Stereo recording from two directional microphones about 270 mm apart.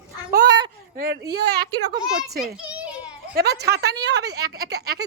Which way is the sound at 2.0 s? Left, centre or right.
Centre.